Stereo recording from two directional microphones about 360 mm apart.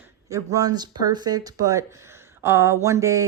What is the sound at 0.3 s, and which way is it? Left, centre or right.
Speech, centre.